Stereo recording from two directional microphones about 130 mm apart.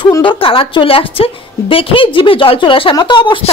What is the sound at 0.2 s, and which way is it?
A woman's voice, 40° left (ahead or behind).